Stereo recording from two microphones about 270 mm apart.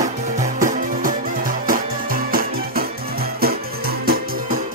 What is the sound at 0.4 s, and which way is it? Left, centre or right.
Music, right.